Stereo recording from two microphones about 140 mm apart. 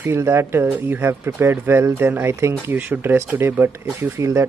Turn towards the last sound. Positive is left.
turn(degrees=-20)  # may be behind; listen again after turning